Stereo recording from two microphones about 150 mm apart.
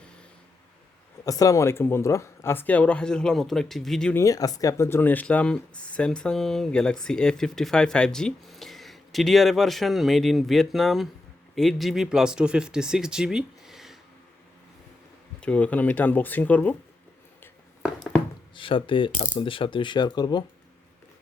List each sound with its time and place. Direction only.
1.2 s speech: 20° left (ahead or behind); by 4.1 s centre (ahead or behind)
4.1 s speech: 20° left (ahead or behind); by 14.0 s centre (ahead or behind)
15.4 s speech: 10° left (ahead or behind)
17.8 s a sound: 5° left (ahead or behind)
18.5 s speech: 35° left (ahead or behind)